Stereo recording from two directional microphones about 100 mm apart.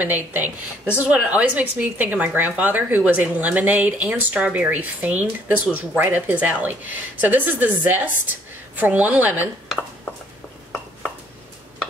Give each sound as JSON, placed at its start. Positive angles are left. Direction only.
{"t": 0.0, "sound": "speech", "side_deg": -20}